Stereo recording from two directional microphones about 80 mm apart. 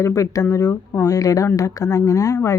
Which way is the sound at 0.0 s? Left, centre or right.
Left.